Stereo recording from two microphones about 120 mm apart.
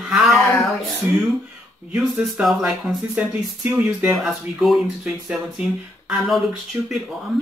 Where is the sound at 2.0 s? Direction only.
5° right (ahead or behind).